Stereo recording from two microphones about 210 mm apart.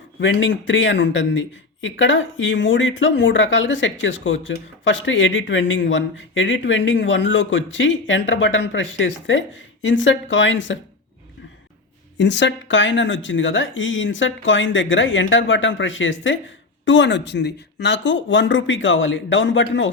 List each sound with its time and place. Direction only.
0.2 s a man's voice: 60° left (ahead or behind)
12.1 s a man's voice: 60° left (ahead or behind)